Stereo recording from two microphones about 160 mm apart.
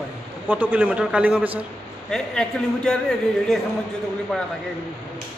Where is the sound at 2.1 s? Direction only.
5° left (ahead or behind).